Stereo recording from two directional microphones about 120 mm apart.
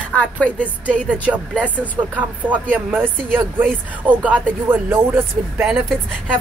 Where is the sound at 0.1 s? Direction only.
10° left (ahead or behind).